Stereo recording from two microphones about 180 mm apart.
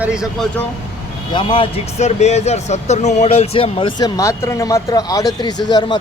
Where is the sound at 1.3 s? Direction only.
25° left (ahead or behind).